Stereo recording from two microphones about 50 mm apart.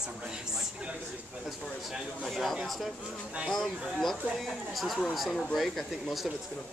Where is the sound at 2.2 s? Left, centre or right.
Centre.